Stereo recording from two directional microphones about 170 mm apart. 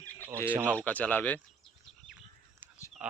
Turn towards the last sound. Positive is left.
turn(degrees=-5)  # may be behind; listen again after turning